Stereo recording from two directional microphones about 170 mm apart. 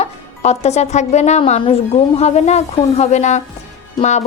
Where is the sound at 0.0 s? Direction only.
40° left (ahead or behind).